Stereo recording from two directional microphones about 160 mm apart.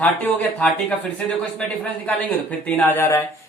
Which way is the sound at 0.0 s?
10° left (ahead or behind).